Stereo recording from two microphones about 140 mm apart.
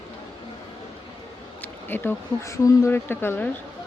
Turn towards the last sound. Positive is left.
turn(degrees=15)  # may be behind; listen again after turning